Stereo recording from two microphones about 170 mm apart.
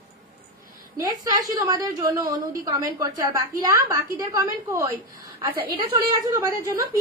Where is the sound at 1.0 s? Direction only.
20° right (ahead or behind).